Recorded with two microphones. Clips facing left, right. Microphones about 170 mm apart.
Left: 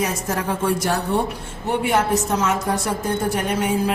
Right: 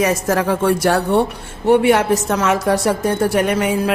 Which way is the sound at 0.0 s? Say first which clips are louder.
Right 7 dB; 85° right.